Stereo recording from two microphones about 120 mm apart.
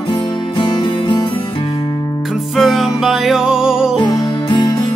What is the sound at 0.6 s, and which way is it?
Music, 40° left (ahead or behind).